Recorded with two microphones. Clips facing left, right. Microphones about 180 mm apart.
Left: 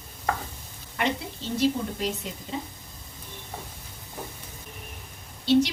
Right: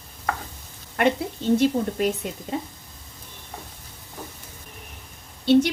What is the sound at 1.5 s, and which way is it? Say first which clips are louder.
A woman's voice: right 3 dB; 50° right (ahead or behind).